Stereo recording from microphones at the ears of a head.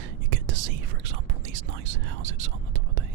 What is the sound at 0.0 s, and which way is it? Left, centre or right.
Whispering, right.